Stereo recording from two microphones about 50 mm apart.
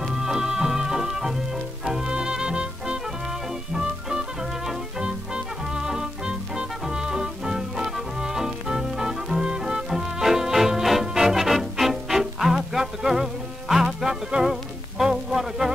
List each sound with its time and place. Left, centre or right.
0.1 s music: centre